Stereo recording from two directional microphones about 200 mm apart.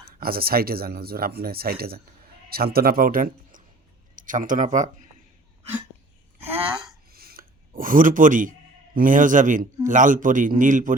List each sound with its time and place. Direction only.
0.2 s speech: 50° right (ahead or behind)
7.1 s a sound: 50° right (ahead or behind)
9.0 s a man's voice: 40° right (ahead or behind)